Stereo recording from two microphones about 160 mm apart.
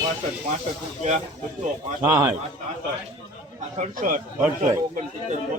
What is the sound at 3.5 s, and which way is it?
A man's voice, 50° right (ahead or behind).